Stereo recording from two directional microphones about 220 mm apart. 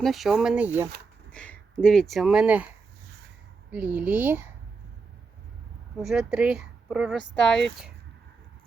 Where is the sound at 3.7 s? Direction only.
5° right (ahead or behind).